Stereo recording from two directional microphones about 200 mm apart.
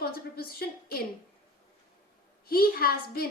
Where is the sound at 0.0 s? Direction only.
50° left (ahead or behind).